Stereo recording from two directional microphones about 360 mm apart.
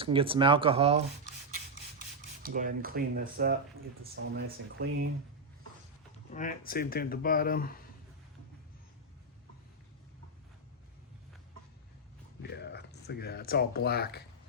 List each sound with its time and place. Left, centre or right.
0.0 s speech: centre
1.5 s filing: right
4.1 s speech: right
6.3 s speech: left
12.4 s speech: left